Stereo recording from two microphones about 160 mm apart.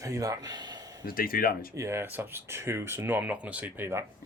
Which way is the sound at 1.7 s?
15° right (ahead or behind).